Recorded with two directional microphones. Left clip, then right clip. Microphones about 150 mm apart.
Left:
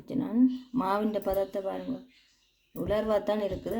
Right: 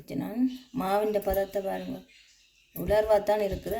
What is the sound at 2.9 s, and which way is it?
Speech, 15° left (ahead or behind).